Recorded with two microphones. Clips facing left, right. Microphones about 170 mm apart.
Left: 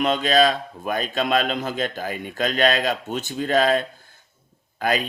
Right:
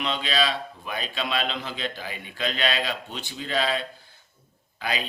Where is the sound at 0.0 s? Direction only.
45° left (ahead or behind).